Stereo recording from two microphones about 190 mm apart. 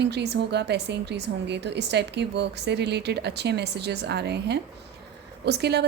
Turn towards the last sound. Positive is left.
turn(degrees=-60)  # may be behind; listen again after turning